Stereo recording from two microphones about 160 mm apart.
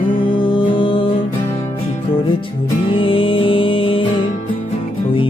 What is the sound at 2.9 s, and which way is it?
Music, 35° left (ahead or behind).